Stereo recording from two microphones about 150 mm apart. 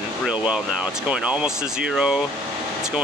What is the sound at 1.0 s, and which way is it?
Speech, 5° right (ahead or behind).